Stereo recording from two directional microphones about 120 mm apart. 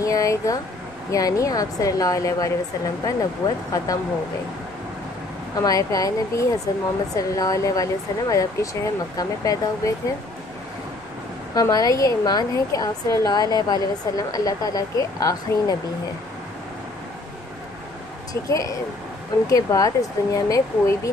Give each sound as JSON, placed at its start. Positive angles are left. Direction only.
{"t": 0.0, "sound": "speech", "side_deg": 30}
{"t": 5.6, "sound": "speech", "side_deg": 30}
{"t": 11.5, "sound": "a woman's voice", "side_deg": 30}
{"t": 18.3, "sound": "speech", "side_deg": 30}